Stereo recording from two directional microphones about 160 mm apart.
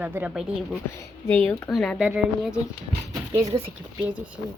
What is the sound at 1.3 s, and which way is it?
Speech, 10° left (ahead or behind).